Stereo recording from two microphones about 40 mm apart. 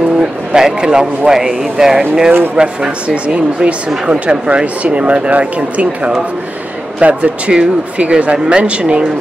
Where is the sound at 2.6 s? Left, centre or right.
Right.